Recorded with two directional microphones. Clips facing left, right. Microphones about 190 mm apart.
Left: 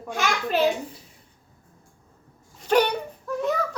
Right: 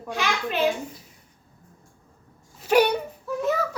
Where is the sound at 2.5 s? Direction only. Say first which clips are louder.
Right 1 dB; 10° right (ahead or behind).